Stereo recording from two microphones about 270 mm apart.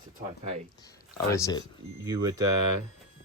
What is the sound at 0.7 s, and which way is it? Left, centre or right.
Speech, centre.